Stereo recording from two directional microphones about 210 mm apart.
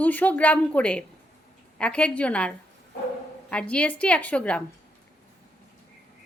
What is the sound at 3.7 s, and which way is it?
Speech, 5° left (ahead or behind).